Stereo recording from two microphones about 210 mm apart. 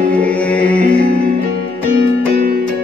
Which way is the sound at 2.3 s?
45° right (ahead or behind).